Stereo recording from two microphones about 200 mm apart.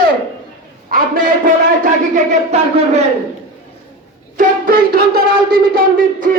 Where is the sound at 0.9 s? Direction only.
45° right (ahead or behind).